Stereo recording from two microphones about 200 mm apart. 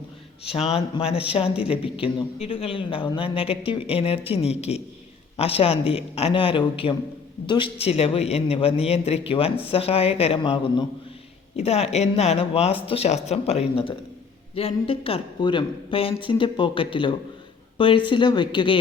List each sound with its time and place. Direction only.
0.4 s a man's voice: 30° left (ahead or behind)